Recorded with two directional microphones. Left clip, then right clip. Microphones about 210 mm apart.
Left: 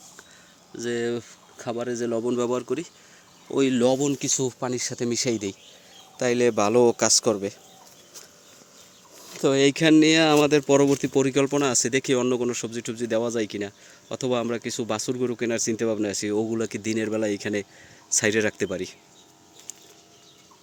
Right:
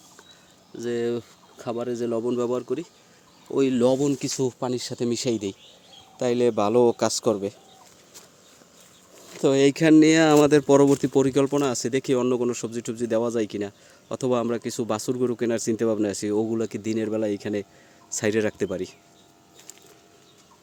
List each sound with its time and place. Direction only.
0.8 s speech: 10° right (ahead or behind)
3.8 s speech: 25° right (ahead or behind)
9.2 s speech: 15° right (ahead or behind)